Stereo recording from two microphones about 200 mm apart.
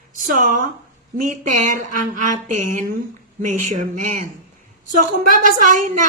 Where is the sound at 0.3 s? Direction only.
40° right (ahead or behind).